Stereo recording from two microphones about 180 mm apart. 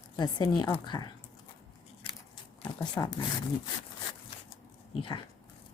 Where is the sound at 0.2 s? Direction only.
25° left (ahead or behind).